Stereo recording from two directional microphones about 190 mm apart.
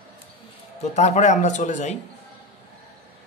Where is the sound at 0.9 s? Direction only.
35° left (ahead or behind).